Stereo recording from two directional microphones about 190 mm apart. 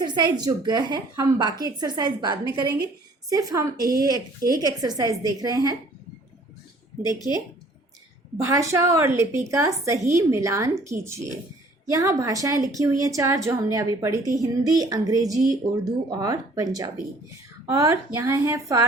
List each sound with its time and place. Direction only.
0.0 s a woman's voice: 20° right (ahead or behind)
7.1 s speech: 20° left (ahead or behind)
8.4 s a woman's voice: 15° right (ahead or behind)